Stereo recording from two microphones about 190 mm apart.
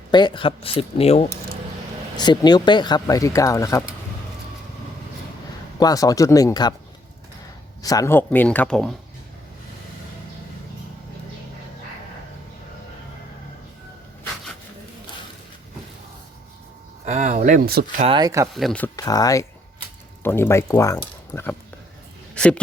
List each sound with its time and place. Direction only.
0.1 s speech: 25° left (ahead or behind)
2.1 s speech: 20° left (ahead or behind)
5.8 s speech: 20° left (ahead or behind)
7.8 s speech: 20° left (ahead or behind); by 9.0 s centre (ahead or behind)
17.1 s a sound: 40° right (ahead or behind)
18.0 s speech: 25° right (ahead or behind)
18.5 s speech: 5° left (ahead or behind)
18.9 s speech: 20° left (ahead or behind)